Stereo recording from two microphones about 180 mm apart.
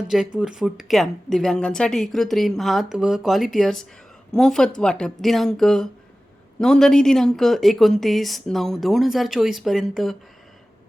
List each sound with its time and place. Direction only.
0.1 s speech: 5° right (ahead or behind)